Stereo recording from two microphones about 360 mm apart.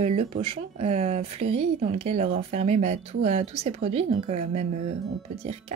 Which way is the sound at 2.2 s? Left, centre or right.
Centre.